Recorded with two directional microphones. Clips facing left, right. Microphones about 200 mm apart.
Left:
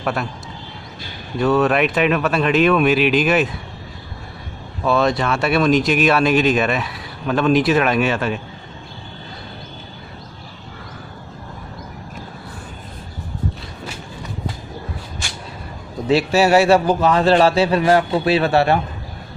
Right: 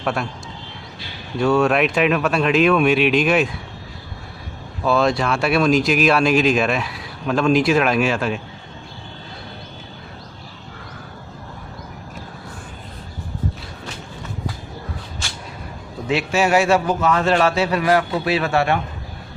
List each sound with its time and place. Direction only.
0.0 s speech: centre (ahead or behind)
1.4 s speech: centre (ahead or behind)
4.8 s speech: centre (ahead or behind)
16.0 s a man's voice: 35° left (ahead or behind)